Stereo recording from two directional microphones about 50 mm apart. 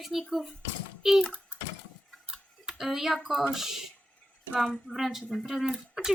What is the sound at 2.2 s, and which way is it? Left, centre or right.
Tick-tock, centre.